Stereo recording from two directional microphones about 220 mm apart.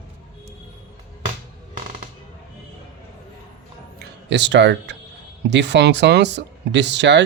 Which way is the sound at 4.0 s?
50° right (ahead or behind).